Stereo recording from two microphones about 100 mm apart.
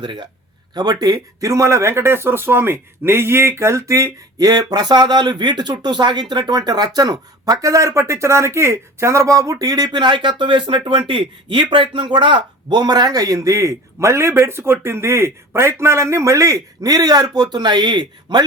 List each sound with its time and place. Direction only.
0.0 s speech: 50° right (ahead or behind)